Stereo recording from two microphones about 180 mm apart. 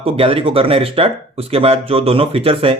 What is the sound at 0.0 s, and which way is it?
Speech, 30° right (ahead or behind).